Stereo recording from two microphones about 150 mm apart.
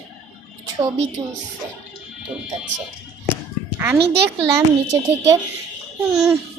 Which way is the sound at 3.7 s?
15° right (ahead or behind).